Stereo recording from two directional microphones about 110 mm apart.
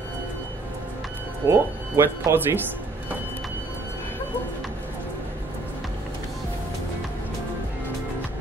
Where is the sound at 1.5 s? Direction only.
25° right (ahead or behind).